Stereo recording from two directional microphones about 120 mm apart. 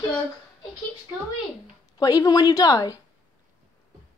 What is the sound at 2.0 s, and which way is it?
A woman's voice, 35° left (ahead or behind).